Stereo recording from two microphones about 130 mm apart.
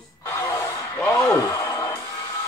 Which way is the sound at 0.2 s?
25° left (ahead or behind).